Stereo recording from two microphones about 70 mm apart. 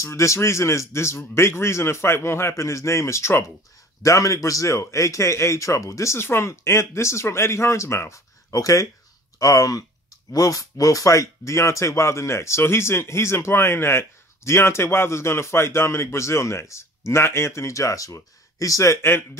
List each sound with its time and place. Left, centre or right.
0.0 s speech: left